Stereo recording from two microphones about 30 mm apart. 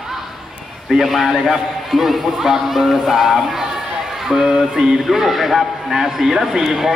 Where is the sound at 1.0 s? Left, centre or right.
Centre.